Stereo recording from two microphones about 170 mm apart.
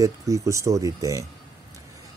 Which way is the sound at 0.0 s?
20° right (ahead or behind).